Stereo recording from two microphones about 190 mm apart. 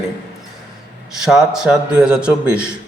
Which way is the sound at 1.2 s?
Centre (ahead or behind).